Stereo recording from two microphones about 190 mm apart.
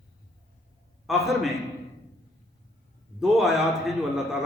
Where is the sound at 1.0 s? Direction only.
Centre (ahead or behind).